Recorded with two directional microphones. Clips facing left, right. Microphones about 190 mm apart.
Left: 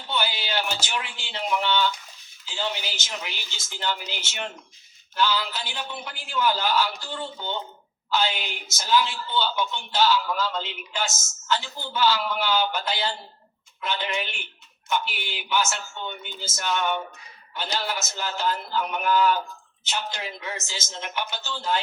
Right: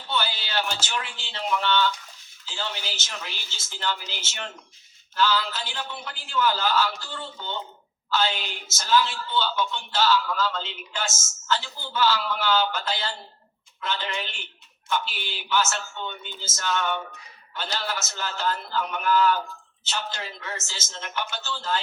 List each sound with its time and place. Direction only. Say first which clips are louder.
0.1 s a woman's voice: left 1 dB; 15° left (ahead or behind)